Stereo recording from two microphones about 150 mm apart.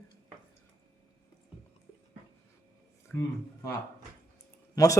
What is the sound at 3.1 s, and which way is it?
Speech, 10° left (ahead or behind).